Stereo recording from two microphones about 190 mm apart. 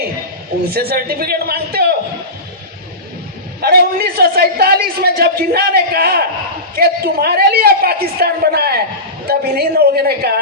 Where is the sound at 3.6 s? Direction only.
55° right (ahead or behind).